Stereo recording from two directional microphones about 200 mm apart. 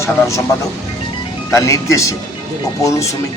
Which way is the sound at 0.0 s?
15° left (ahead or behind).